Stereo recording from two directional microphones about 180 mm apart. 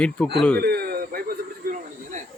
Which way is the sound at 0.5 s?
60° right (ahead or behind).